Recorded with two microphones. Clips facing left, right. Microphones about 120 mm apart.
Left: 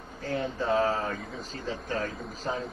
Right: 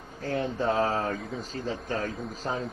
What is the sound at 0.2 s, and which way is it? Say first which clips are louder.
A man's voice: right 2 dB; 40° right (ahead or behind).